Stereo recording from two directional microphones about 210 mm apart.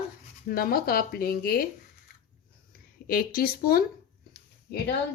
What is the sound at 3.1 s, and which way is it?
Speech, 45° left (ahead or behind).